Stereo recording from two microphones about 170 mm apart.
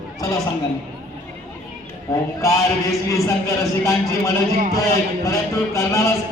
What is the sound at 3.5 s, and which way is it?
A man's voice, 20° left (ahead or behind).